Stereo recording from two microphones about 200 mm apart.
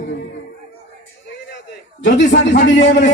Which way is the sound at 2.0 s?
60° left (ahead or behind).